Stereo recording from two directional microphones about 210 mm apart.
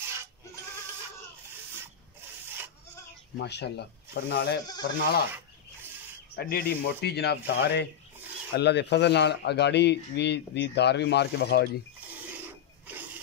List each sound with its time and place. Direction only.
0.0 s goat: 10° right (ahead or behind)
3.3 s speech: 55° left (ahead or behind)
6.3 s speech: 50° left (ahead or behind)
12.4 s filing: 10° right (ahead or behind)